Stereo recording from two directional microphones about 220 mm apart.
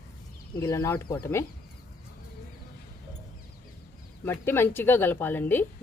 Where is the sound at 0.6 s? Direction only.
10° left (ahead or behind).